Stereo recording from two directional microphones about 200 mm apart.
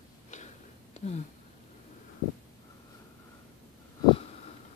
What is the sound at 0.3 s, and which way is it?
Tick-tock, 35° left (ahead or behind).